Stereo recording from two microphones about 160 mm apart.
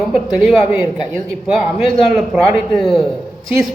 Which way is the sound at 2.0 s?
Centre (ahead or behind).